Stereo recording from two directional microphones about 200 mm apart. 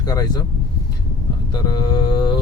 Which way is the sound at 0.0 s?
20° left (ahead or behind).